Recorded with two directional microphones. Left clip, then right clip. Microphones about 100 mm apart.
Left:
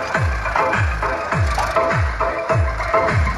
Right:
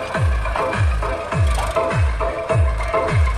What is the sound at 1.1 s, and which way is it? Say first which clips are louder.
Music: left 3 dB; 50° right (ahead or behind).